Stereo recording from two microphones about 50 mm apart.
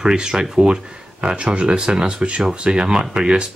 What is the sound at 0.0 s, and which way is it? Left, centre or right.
A man's voice, centre.